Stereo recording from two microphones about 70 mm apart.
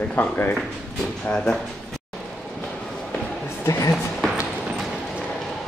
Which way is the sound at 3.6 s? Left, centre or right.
Left.